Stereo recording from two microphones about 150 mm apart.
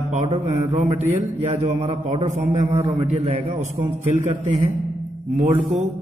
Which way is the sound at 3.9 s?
50° right (ahead or behind).